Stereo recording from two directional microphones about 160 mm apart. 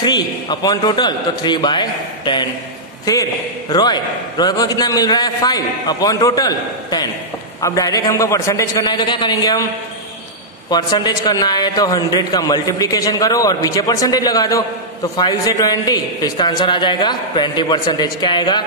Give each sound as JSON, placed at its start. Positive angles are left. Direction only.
{"t": 0.0, "sound": "a man's voice", "side_deg": 25}
{"t": 3.7, "sound": "a man's voice", "side_deg": 25}
{"t": 10.7, "sound": "a man's voice", "side_deg": 25}